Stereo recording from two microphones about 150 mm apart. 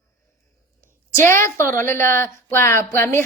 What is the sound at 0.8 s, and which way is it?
A woman's voice, 15° left (ahead or behind).